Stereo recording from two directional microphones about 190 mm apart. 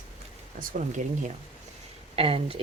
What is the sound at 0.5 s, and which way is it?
Speech, 45° right (ahead or behind).